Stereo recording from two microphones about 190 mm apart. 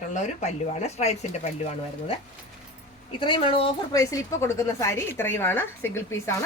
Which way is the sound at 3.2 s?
25° left (ahead or behind).